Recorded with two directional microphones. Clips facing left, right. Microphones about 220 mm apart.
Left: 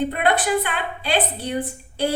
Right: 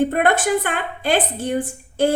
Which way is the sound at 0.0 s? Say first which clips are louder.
Right 3 dB; 45° right (ahead or behind).